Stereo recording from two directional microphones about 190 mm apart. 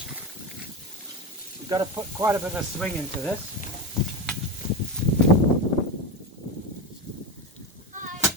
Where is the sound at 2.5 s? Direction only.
5° left (ahead or behind).